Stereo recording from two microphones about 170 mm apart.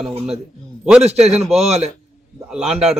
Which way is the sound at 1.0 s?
40° right (ahead or behind).